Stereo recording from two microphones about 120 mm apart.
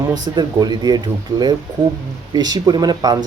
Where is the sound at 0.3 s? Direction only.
35° right (ahead or behind).